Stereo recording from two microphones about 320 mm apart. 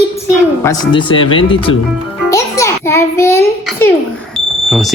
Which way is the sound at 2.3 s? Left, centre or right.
Centre.